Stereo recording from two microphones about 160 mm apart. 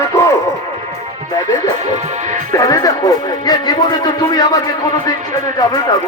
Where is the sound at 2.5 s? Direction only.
20° left (ahead or behind).